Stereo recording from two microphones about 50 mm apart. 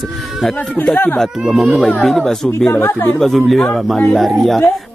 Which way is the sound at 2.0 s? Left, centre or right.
Centre.